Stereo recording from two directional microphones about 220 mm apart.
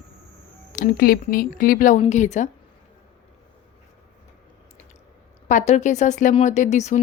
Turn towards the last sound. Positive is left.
turn(degrees=30)  # may be behind; listen again after turning